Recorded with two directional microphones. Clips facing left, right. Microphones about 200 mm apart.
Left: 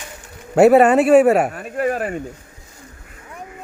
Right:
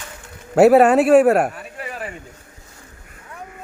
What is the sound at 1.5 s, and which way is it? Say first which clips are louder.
Speech: left 11 dB; 50° left (ahead or behind).